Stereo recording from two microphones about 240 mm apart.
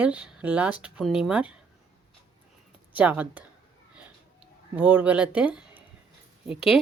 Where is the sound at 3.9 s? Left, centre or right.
Centre.